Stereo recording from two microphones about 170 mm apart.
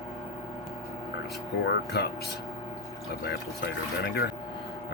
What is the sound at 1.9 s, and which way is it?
Speech, 75° left (ahead or behind).